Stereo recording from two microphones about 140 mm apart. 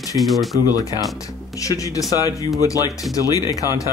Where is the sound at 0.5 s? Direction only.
25° left (ahead or behind).